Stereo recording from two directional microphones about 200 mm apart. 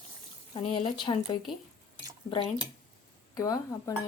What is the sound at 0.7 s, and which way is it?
Speech, 25° left (ahead or behind).